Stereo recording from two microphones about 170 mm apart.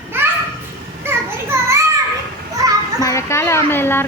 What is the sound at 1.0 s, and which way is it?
Children playing, 15° right (ahead or behind).